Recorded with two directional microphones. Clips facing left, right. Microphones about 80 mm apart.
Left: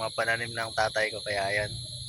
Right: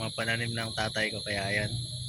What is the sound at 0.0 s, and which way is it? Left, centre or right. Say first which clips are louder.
A man's voice: left 4 dB; centre.